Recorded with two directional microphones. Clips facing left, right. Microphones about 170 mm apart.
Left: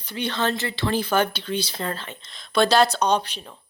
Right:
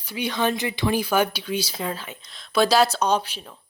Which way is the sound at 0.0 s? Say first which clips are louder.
Right 1 dB; 10° right (ahead or behind).